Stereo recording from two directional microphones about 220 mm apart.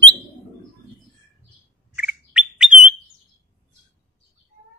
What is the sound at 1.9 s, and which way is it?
Bird, 5° right (ahead or behind).